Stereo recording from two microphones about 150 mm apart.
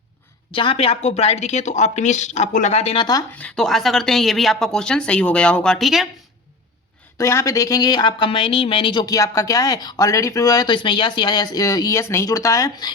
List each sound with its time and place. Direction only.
0.5 s speech: 35° left (ahead or behind)
3.0 s speech: 25° left (ahead or behind)
3.3 s speech: 5° left (ahead or behind)
7.2 s speech: 20° left (ahead or behind)